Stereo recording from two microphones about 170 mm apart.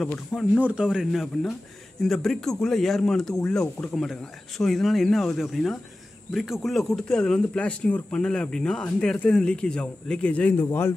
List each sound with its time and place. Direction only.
0.0 s speech: centre (ahead or behind)